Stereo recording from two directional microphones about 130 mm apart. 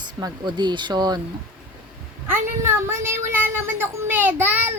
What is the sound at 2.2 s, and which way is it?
A woman's voice, 20° right (ahead or behind).